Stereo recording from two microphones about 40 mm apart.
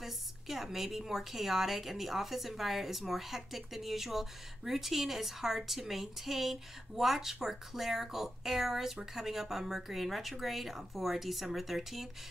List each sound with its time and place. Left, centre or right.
0.0 s a woman's voice: centre